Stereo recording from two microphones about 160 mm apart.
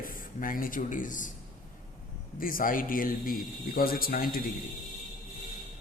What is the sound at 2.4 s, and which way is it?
Speech, 60° left (ahead or behind).